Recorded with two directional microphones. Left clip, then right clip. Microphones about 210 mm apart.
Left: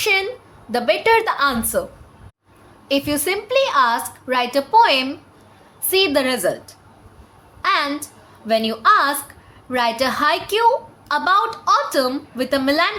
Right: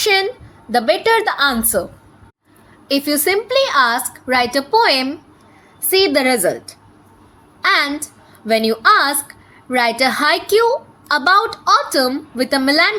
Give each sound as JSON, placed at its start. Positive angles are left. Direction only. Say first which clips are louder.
{"t": 0.0, "sound": "a woman's voice", "louder": "right 3 dB", "side_deg": -20}
{"t": 2.9, "sound": "a woman's voice", "louder": "right 4 dB", "side_deg": -20}